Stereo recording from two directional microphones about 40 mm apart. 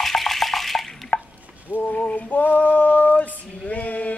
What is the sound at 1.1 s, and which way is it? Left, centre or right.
Chopping, left.